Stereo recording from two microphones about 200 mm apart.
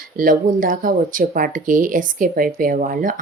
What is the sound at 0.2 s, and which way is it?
Speech, 45° right (ahead or behind).